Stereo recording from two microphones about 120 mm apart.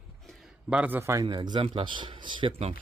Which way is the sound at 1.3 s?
40° right (ahead or behind).